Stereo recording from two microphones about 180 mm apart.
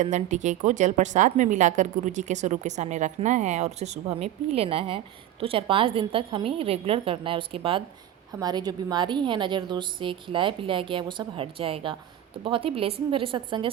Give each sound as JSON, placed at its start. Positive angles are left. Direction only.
{"t": 0.0, "sound": "a woman's voice", "side_deg": -40}